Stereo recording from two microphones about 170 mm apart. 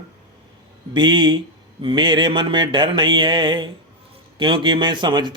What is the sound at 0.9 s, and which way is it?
Speech, 25° right (ahead or behind).